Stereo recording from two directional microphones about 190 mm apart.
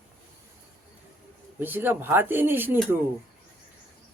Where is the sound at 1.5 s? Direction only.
10° right (ahead or behind).